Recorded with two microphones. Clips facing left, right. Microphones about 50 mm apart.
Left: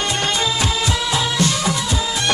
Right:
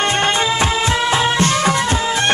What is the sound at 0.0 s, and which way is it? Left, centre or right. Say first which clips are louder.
Music: right 4 dB; right.